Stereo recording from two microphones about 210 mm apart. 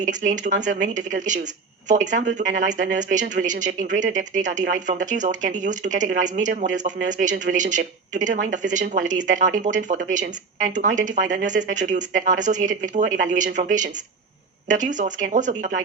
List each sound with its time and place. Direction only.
0.0 s speech: 35° right (ahead or behind)